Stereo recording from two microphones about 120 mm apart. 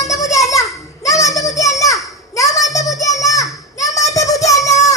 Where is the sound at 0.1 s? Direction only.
25° left (ahead or behind).